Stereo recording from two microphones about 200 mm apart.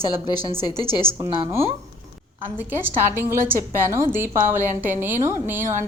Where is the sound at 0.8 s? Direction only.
30° right (ahead or behind).